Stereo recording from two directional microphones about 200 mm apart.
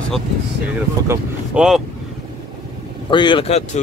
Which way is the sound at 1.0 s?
10° right (ahead or behind).